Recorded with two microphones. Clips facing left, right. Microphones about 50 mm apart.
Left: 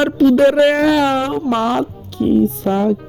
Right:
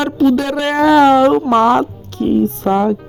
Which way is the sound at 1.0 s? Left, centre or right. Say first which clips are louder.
Right 7 dB; right.